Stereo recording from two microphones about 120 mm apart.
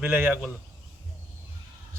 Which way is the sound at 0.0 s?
15° right (ahead or behind).